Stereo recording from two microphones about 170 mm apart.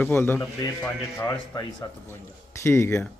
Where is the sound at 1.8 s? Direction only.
20° left (ahead or behind).